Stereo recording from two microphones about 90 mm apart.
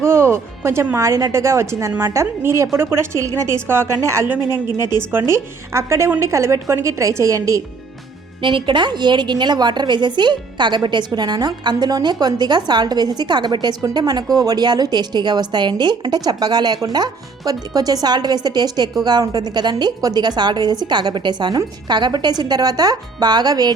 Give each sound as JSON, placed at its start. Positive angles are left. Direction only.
{"t": 0.0, "sound": "a woman's voice", "side_deg": -30}
{"t": 8.4, "sound": "a woman's voice", "side_deg": -65}